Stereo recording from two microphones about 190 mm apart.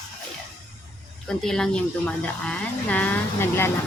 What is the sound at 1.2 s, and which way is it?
Speech, 5° left (ahead or behind).